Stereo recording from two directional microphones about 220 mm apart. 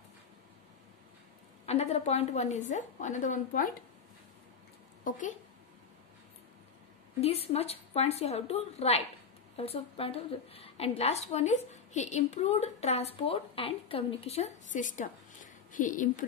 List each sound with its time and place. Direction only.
1.7 s a woman's voice: 30° left (ahead or behind)
5.1 s a woman's voice: 40° left (ahead or behind)
7.2 s a woman's voice: 25° left (ahead or behind)